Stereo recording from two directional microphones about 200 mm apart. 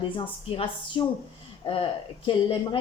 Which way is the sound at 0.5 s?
25° left (ahead or behind).